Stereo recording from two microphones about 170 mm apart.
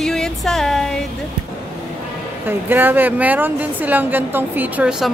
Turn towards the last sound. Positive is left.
turn(degrees=-5)  # may be behind; listen again after turning